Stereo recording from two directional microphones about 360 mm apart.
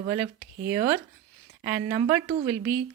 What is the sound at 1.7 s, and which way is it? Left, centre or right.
Speech, centre.